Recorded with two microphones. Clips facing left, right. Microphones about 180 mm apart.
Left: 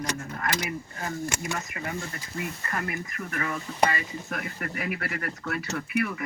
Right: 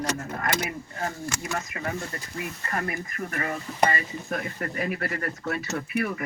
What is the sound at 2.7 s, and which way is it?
Speech, 40° right (ahead or behind).